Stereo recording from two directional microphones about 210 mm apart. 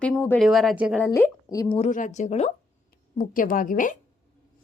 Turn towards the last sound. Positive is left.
turn(degrees=40)  # may be behind; listen again after turning